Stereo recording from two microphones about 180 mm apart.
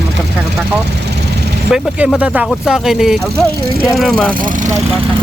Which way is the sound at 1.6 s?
Centre (ahead or behind).